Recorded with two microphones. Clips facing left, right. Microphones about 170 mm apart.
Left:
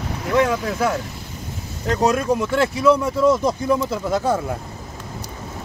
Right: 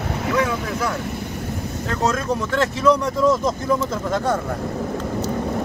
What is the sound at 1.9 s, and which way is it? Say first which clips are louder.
Speech: left 4 dB; 15° left (ahead or behind).